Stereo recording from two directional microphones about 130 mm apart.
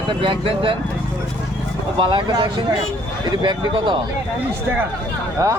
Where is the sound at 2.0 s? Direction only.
35° right (ahead or behind).